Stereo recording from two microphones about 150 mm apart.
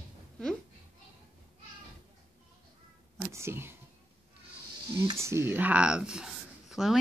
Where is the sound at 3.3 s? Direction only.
15° right (ahead or behind).